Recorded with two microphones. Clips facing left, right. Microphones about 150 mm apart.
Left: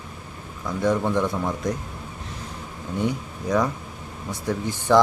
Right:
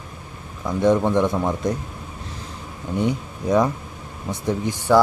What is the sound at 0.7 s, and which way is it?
Speech, 20° right (ahead or behind).